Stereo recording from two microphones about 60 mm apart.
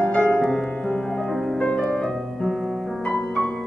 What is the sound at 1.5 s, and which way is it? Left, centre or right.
Music, centre.